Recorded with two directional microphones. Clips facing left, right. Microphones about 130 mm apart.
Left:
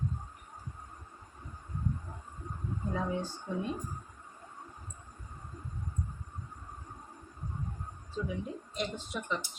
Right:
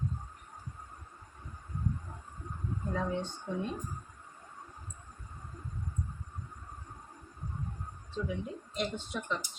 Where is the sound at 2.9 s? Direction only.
5° left (ahead or behind).